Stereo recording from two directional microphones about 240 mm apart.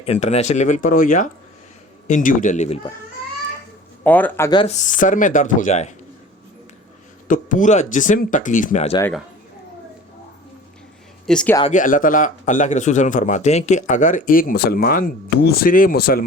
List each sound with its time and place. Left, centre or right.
0.0 s speech: left
4.0 s speech: centre
4.6 s speech: left
7.3 s speech: left
11.3 s speech: centre
11.7 s speech: left